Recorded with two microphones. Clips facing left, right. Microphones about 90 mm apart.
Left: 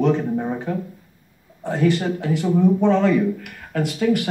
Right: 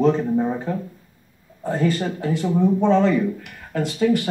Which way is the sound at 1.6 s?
15° left (ahead or behind).